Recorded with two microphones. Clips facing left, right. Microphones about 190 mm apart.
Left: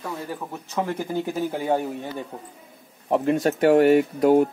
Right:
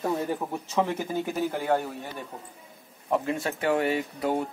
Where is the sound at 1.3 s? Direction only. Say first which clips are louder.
Left 1 dB; 10° left (ahead or behind).